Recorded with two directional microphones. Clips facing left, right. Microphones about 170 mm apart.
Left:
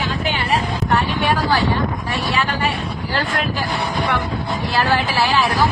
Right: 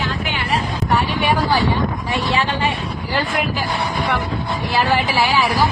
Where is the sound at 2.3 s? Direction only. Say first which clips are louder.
Even; 25° right (ahead or behind).